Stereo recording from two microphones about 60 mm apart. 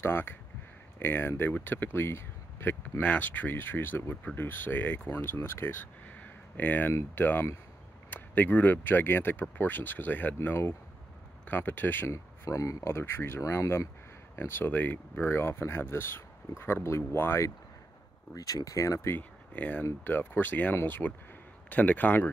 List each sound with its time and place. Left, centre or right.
0.0 s speech: left
6.0 s a sound: left
7.2 s speech: left
12.1 s speech: left
12.8 s speech: left
18.3 s speech: left
19.1 s speech: left